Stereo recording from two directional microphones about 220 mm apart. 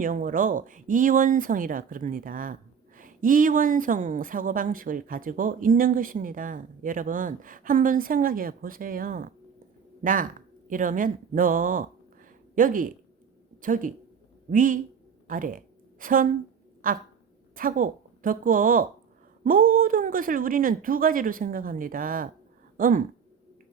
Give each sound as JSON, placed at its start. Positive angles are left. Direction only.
{"t": 0.0, "sound": "a woman's voice", "side_deg": -40}